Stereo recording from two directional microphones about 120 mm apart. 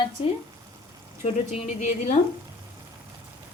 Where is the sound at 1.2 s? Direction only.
65° left (ahead or behind).